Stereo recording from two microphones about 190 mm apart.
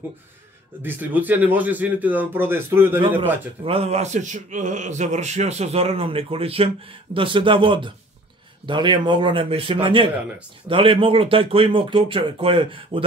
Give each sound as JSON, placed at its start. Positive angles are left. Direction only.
{"t": 0.8, "sound": "a man's voice", "side_deg": -10}
{"t": 3.6, "sound": "a man's voice", "side_deg": -30}